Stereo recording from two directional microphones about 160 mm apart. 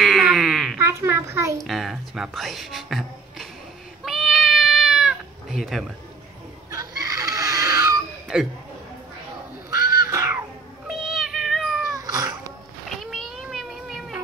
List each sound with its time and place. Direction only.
0.0 s a sound: centre (ahead or behind)
0.7 s a child's voice: 15° right (ahead or behind)
1.6 s speech: centre (ahead or behind)
4.0 s cat: centre (ahead or behind)
7.0 s baby cry: 25° right (ahead or behind)
10.0 s music: 20° right (ahead or behind)
10.9 s cat: centre (ahead or behind)
11.9 s cat: 25° right (ahead or behind)
13.0 s a sound: centre (ahead or behind)